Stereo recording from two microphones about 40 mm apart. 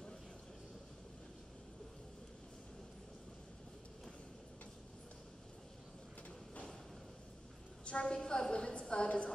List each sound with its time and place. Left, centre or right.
7.8 s a woman's voice: left